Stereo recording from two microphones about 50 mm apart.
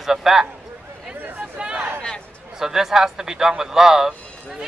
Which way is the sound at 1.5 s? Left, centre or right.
Centre.